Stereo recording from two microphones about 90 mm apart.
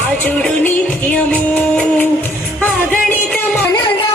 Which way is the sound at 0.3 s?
15° left (ahead or behind).